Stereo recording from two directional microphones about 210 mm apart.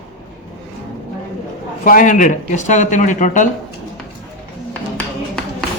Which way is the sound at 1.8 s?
40° left (ahead or behind).